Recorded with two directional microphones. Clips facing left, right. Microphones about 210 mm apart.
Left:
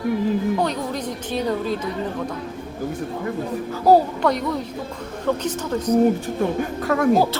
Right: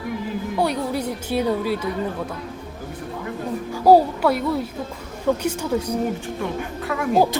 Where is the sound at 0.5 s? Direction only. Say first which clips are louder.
Right 1 dB; 10° right (ahead or behind).